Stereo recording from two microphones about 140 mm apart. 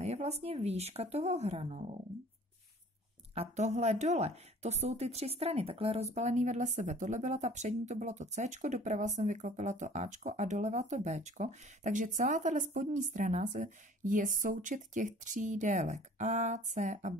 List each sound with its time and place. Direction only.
0.0 s speech: 50° right (ahead or behind)
3.3 s speech: 55° right (ahead or behind)